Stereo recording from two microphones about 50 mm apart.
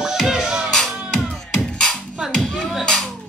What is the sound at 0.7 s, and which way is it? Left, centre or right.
Music, centre.